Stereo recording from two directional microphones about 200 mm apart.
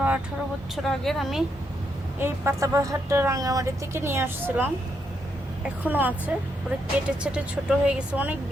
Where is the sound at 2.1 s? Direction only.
10° right (ahead or behind).